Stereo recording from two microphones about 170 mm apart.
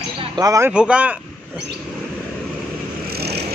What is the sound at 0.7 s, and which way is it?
Speech, 5° right (ahead or behind).